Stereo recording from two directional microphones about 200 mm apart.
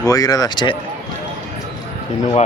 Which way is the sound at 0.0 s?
15° left (ahead or behind).